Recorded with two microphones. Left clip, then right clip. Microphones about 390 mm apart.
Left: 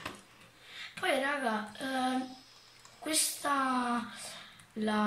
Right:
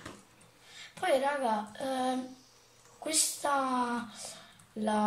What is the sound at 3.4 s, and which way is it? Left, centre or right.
Speech, right.